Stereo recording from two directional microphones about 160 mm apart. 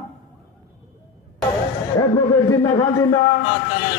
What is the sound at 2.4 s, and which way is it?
Speech, 25° left (ahead or behind).